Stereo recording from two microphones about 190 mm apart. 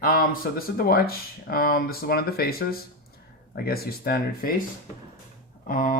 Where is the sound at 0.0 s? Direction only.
50° left (ahead or behind).